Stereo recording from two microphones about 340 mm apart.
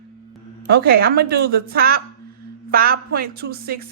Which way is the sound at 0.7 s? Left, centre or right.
Right.